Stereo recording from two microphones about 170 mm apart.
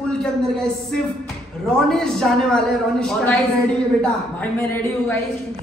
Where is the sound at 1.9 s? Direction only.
5° left (ahead or behind).